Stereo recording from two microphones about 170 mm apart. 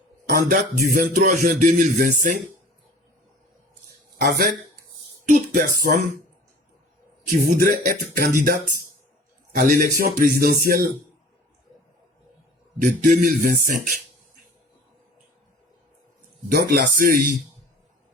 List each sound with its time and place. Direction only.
0.3 s speech: 60° right (ahead or behind)
4.2 s a man's voice: 60° right (ahead or behind)
7.4 s speech: 55° right (ahead or behind)
12.8 s speech: 55° right (ahead or behind)
16.5 s a man's voice: 65° right (ahead or behind)